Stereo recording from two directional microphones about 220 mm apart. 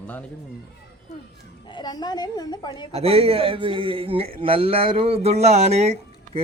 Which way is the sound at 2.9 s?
25° right (ahead or behind).